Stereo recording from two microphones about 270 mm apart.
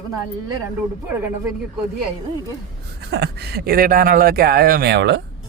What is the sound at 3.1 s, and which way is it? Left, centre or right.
Speech, right.